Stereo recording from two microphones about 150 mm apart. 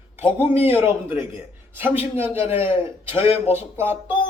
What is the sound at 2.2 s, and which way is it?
Speech, 15° right (ahead or behind).